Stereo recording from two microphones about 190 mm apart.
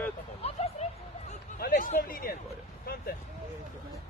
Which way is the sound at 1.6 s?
50° left (ahead or behind).